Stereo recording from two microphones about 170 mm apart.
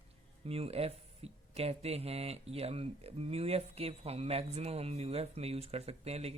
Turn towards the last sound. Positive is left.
turn(degrees=-40)  # may be behind; listen again after turning